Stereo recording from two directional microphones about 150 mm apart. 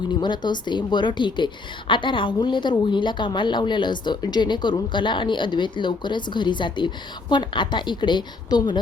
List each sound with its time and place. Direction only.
0.2 s a woman's voice: 30° left (ahead or behind)